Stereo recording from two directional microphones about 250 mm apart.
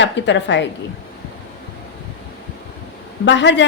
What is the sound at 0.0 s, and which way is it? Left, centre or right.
Speech, left.